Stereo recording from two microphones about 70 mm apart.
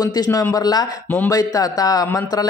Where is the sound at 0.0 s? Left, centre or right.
Left.